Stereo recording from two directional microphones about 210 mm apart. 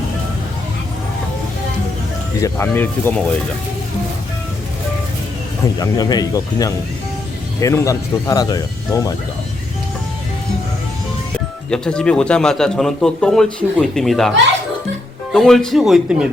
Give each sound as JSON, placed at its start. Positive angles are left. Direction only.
{"t": 2.4, "sound": "speech", "side_deg": 10}
{"t": 5.8, "sound": "speech", "side_deg": 20}
{"t": 11.3, "sound": "speech", "side_deg": 5}